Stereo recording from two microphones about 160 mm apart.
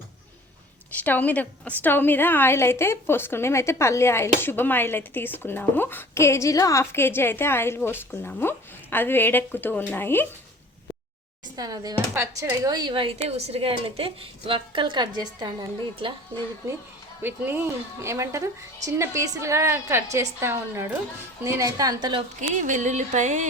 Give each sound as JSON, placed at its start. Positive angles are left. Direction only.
{"t": 0.9, "sound": "speech", "side_deg": 10}
{"t": 11.5, "sound": "speech", "side_deg": -25}
{"t": 17.2, "sound": "a woman's voice", "side_deg": -15}
{"t": 22.4, "sound": "music", "side_deg": -50}